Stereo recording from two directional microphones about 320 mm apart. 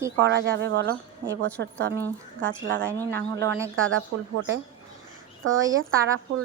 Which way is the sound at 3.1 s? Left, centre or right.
Right.